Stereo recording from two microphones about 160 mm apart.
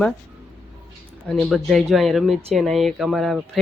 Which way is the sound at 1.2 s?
Centre (ahead or behind).